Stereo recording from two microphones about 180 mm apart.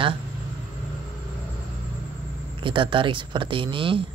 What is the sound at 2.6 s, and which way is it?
Speech, 30° right (ahead or behind).